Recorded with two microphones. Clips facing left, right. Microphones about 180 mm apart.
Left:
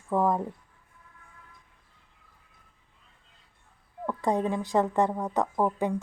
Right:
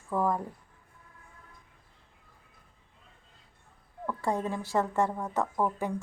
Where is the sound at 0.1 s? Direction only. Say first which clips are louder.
Left 4 dB; 20° left (ahead or behind).